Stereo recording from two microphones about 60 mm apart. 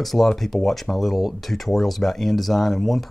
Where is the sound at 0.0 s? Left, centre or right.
Centre.